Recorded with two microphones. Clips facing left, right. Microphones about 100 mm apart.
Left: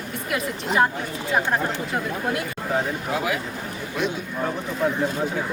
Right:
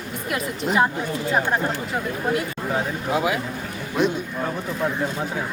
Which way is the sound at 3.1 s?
25° right (ahead or behind).